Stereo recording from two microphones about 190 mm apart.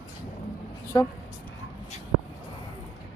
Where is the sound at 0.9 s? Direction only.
20° left (ahead or behind).